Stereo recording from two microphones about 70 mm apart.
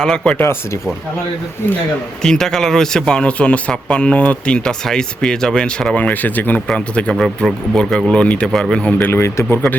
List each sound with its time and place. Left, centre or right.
0.0 s speech: centre
2.2 s speech: centre; by 6.6 s left
6.7 s speech: centre
8.1 s speech: centre
8.4 s speech: centre
8.7 s speech: centre
9.1 s speech: left